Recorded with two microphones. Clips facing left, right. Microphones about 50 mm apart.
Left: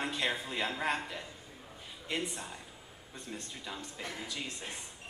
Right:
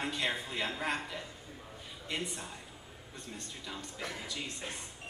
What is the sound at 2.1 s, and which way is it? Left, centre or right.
Speech, left.